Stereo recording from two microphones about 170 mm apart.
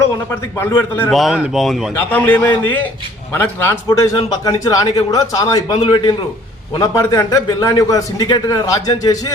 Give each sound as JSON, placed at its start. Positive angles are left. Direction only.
{"t": 0.0, "sound": "a man's voice", "side_deg": 15}
{"t": 1.1, "sound": "a man's voice", "side_deg": 0}